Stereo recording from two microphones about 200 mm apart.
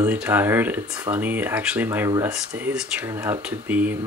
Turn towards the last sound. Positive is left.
turn(degrees=-10)  # may be behind; listen again after turning